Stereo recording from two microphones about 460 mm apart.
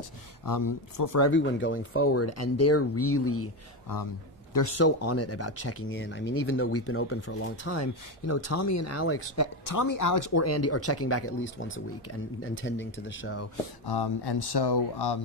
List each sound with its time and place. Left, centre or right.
0.5 s speech: left
1.3 s speech: left
4.6 s speech: left
9.7 s speech: left
13.8 s speech: left